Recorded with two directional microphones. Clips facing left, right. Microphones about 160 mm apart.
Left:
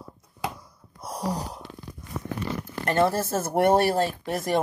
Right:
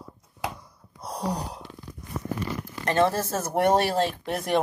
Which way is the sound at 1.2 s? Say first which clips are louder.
Even; 10° left (ahead or behind).